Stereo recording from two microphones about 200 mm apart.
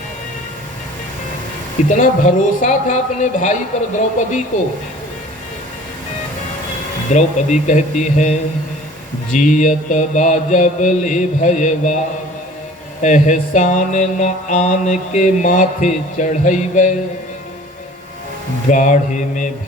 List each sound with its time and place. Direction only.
1.9 s mantra: 40° left (ahead or behind)
7.1 s mantra: 35° left (ahead or behind)
13.0 s mantra: 35° left (ahead or behind)
18.7 s mantra: 40° left (ahead or behind)